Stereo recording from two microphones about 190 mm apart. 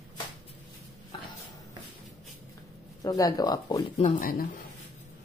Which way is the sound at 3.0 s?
20° left (ahead or behind).